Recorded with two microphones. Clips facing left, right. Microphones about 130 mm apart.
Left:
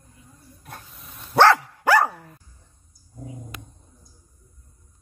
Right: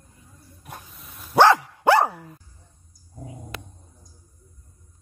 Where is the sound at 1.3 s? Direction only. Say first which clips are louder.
Even; 15° right (ahead or behind).